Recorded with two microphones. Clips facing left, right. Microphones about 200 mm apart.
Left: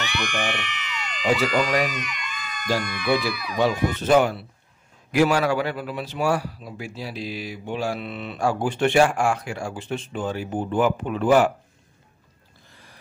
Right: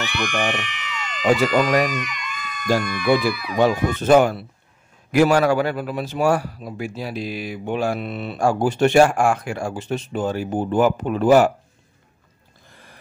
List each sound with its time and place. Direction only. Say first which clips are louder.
0.2 s a man's voice: right 5 dB; 55° right (ahead or behind)
0.7 s a sound: right 2 dB; centre (ahead or behind)
1.2 s a man's voice: right 4 dB; 45° right (ahead or behind)